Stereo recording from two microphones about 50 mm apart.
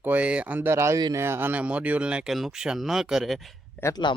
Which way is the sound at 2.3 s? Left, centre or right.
Centre.